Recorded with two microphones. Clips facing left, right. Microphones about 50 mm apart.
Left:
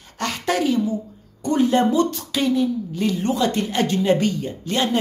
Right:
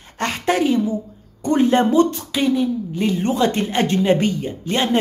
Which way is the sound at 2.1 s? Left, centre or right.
Centre.